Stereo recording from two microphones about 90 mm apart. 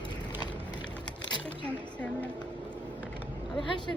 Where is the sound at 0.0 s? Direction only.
55° left (ahead or behind).